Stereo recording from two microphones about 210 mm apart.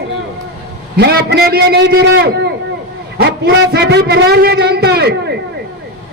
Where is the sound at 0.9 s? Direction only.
50° right (ahead or behind).